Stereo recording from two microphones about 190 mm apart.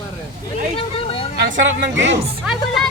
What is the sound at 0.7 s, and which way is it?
Speech, 30° left (ahead or behind).